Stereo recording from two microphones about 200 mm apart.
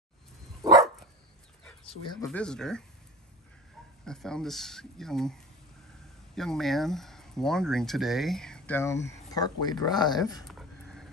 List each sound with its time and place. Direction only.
0.6 s dog: 20° right (ahead or behind)
2.2 s speech: 5° left (ahead or behind)
4.0 s speech: 5° left (ahead or behind); by 10.2 s 20° left (ahead or behind)
10.4 s a sound: centre (ahead or behind)